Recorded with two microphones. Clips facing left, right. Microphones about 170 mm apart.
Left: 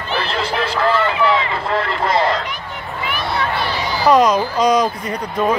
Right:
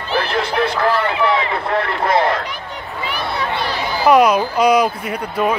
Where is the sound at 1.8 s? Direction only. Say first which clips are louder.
Right 1 dB; 60° right (ahead or behind).